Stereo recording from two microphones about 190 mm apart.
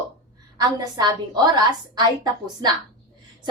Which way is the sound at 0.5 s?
20° right (ahead or behind).